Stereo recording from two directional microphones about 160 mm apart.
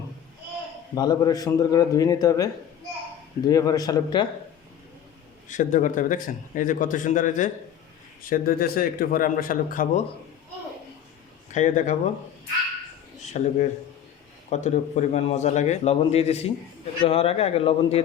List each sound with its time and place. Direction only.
0.9 s a man's voice: 25° left (ahead or behind)
5.5 s speech: 50° left (ahead or behind)
8.3 s speech: 65° left (ahead or behind)
11.5 s a man's voice: 50° left (ahead or behind)
13.2 s a man's voice: 50° left (ahead or behind)